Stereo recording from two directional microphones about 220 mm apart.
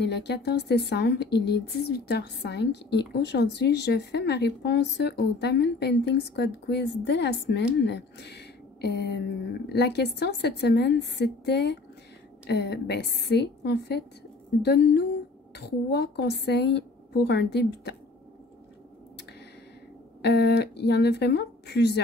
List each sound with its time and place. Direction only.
0.0 s a woman's voice: 50° left (ahead or behind)
20.2 s a woman's voice: 50° left (ahead or behind)